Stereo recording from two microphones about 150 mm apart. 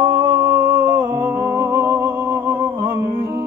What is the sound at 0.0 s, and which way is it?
Music, 10° right (ahead or behind).